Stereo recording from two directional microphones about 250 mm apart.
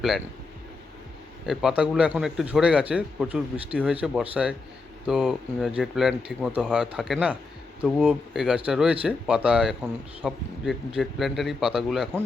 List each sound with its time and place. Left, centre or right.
1.5 s speech: centre